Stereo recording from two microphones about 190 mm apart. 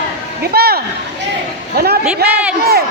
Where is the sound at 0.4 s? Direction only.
55° right (ahead or behind).